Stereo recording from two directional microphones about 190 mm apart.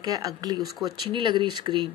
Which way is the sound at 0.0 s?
20° right (ahead or behind).